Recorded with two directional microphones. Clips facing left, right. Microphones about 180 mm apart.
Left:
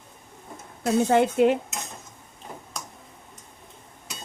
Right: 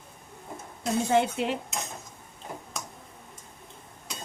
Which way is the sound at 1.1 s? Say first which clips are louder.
Left 6 dB; 50° left (ahead or behind).